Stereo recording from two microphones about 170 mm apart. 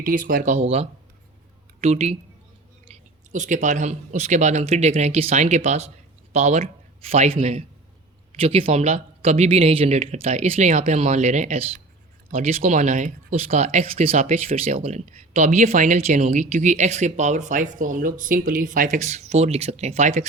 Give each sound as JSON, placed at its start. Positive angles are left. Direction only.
{"t": 0.0, "sound": "speech", "side_deg": -55}